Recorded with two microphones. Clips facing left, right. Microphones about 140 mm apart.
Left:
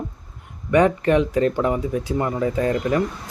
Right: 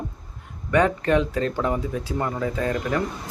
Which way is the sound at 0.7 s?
15° left (ahead or behind).